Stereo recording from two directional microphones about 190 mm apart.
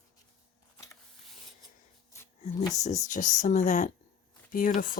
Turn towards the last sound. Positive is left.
turn(degrees=45)  # may be behind; listen again after turning